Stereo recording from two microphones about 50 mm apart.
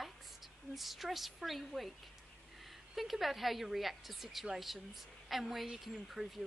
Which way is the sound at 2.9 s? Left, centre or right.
Centre.